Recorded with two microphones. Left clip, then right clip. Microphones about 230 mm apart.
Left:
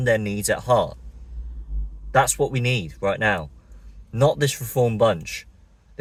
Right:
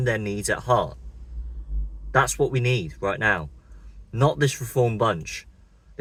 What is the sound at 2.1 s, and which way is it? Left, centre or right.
A man's voice, centre.